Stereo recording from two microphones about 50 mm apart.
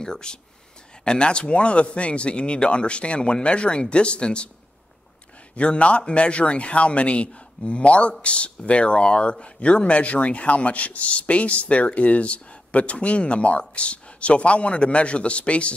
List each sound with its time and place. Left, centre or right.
0.0 s speech: centre
5.6 s speech: left